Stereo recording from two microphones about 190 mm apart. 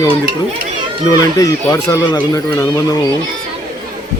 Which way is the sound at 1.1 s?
20° left (ahead or behind).